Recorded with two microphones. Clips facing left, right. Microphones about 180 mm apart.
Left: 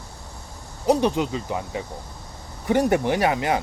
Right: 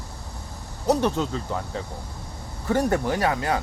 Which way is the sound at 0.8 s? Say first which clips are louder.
Left 2 dB; 15° left (ahead or behind).